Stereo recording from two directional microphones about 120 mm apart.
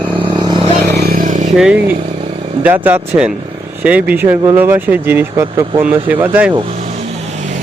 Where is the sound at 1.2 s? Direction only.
90° right.